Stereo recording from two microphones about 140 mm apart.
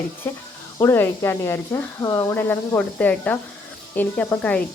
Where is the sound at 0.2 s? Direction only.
15° left (ahead or behind).